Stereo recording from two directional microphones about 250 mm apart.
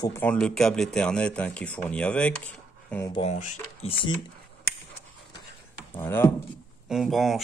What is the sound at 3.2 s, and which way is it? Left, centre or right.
Speech, left.